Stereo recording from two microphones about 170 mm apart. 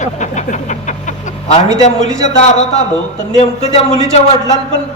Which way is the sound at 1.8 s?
40° left (ahead or behind).